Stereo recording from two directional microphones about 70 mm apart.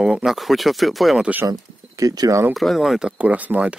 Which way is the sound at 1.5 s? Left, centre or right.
Right.